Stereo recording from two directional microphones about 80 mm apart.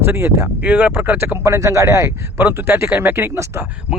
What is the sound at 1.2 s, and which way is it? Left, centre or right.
Speech, right.